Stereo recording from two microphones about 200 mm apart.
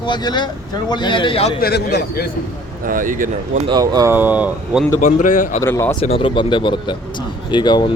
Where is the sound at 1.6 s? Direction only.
55° left (ahead or behind).